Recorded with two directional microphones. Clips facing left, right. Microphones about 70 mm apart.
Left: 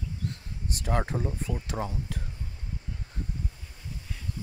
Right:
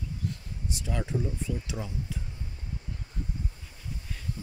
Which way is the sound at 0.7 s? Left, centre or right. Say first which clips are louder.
Left 3 dB; left.